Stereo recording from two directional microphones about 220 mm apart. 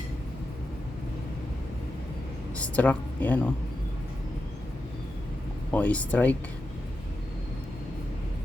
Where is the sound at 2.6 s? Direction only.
5° left (ahead or behind).